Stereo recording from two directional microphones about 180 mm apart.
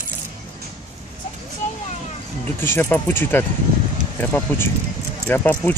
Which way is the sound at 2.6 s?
10° left (ahead or behind).